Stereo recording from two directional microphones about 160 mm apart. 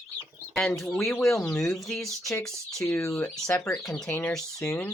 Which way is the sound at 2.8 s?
20° left (ahead or behind).